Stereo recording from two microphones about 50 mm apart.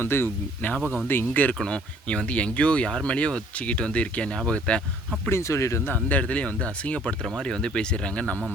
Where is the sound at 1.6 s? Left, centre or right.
Centre.